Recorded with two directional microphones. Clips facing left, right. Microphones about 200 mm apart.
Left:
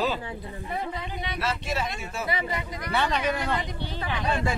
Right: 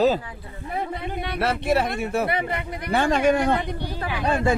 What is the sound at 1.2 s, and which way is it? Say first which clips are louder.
Speech: right 8 dB; 60° right (ahead or behind).